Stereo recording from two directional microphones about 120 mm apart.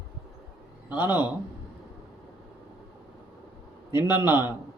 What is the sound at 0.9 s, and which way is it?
Speech, 15° right (ahead or behind).